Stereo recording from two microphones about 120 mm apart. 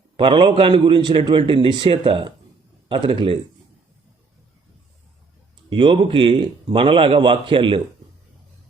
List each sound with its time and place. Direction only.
0.2 s a man's voice: 45° right (ahead or behind)
5.7 s a man's voice: 45° right (ahead or behind)